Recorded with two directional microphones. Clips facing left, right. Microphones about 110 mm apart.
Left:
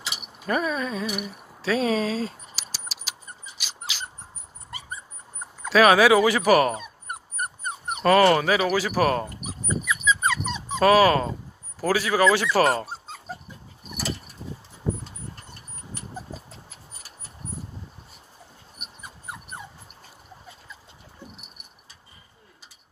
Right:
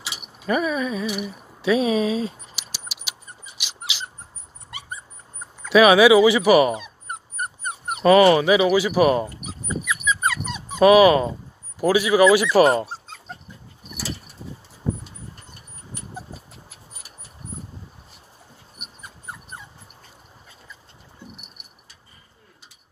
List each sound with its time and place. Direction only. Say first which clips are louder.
0.4 s speech: right 3 dB; 5° right (ahead or behind)
1.7 s speech: right 4 dB; 15° right (ahead or behind)
2.5 s keys jangling: even; 40° left (ahead or behind)
3.5 s a sound: right 3 dB; 40° left (ahead or behind)
5.7 s speech: right 3 dB; 10° right (ahead or behind)
8.0 s speech: right 4 dB; 10° right (ahead or behind)
10.8 s speech: right 4 dB; 15° right (ahead or behind)